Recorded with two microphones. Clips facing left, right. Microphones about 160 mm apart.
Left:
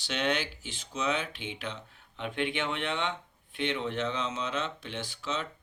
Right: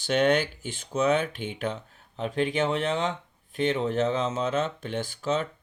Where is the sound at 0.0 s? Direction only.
50° right (ahead or behind).